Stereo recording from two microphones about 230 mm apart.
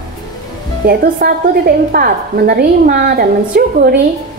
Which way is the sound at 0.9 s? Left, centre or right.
Right.